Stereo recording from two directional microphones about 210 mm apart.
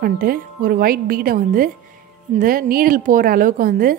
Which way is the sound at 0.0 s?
40° right (ahead or behind).